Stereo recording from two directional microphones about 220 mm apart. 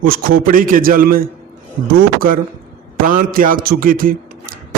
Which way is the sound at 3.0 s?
40° right (ahead or behind).